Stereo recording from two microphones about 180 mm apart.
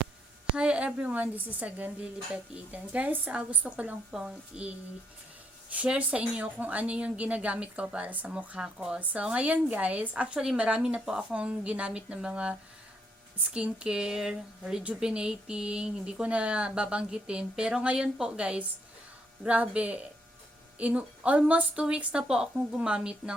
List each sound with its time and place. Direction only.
0.5 s speech: 5° right (ahead or behind)
5.7 s speech: 10° right (ahead or behind)